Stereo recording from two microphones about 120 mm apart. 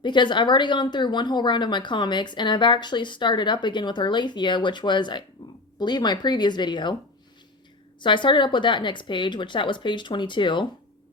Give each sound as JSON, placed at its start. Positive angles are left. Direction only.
{"t": 0.0, "sound": "a woman's voice", "side_deg": 40}
{"t": 8.0, "sound": "a woman's voice", "side_deg": 40}